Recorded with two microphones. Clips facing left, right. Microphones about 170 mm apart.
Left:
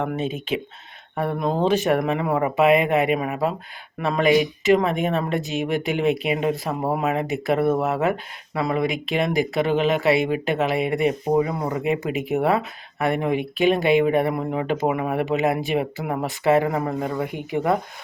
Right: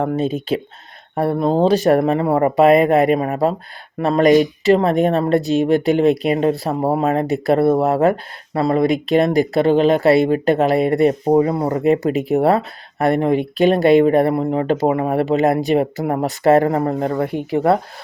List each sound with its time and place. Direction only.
0.0 s speech: 35° right (ahead or behind)